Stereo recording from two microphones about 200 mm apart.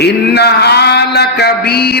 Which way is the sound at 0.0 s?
55° left (ahead or behind).